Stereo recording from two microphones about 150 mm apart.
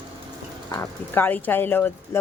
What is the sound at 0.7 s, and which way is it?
Speech, 15° left (ahead or behind).